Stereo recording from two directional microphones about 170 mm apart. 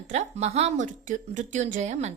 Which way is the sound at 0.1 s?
40° right (ahead or behind).